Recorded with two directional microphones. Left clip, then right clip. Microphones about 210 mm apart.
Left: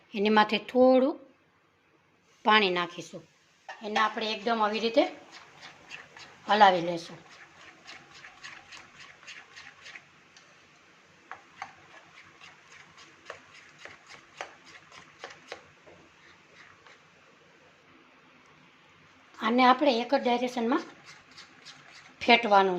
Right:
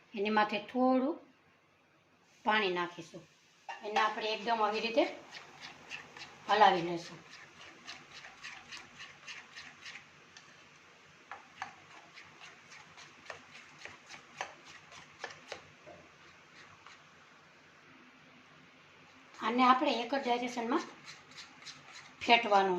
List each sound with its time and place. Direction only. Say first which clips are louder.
0.1 s a woman's voice: left 7 dB; 45° left (ahead or behind)
2.4 s a woman's voice: left 8 dB; 50° left (ahead or behind)
4.2 s a woman's voice: left 4 dB; 55° left (ahead or behind)
6.5 s a woman's voice: left 5 dB; 55° left (ahead or behind)
15.2 s chopping: left 1 dB; 10° left (ahead or behind)
19.4 s a woman's voice: left 5 dB; 55° left (ahead or behind)
22.2 s speech: left 5 dB; 50° left (ahead or behind)